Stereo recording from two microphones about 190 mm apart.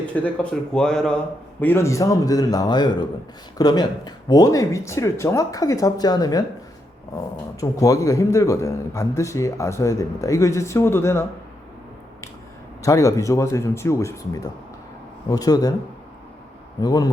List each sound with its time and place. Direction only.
0.1 s a man's voice: 5° left (ahead or behind)
7.6 s a man's voice: 15° left (ahead or behind)
12.8 s a man's voice: 15° left (ahead or behind)
16.8 s a man's voice: 20° left (ahead or behind)